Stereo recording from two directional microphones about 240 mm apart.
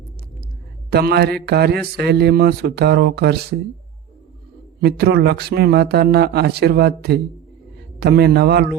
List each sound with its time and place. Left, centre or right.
0.9 s speech: right
4.8 s a man's voice: right